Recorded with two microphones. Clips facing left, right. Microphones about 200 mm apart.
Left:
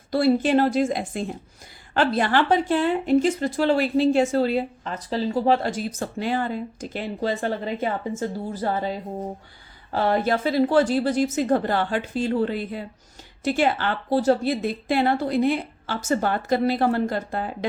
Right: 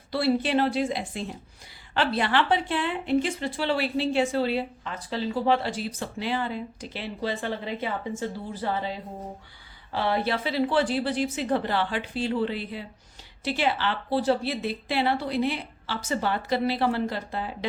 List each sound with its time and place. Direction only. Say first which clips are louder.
0.1 s a woman's voice: left 5 dB; 45° left (ahead or behind)